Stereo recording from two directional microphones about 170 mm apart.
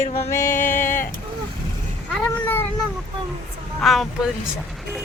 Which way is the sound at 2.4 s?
10° left (ahead or behind).